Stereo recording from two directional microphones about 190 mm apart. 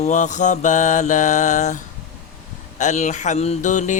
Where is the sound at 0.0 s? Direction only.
40° left (ahead or behind).